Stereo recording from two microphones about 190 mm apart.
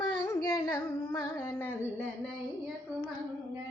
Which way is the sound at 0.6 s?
20° left (ahead or behind).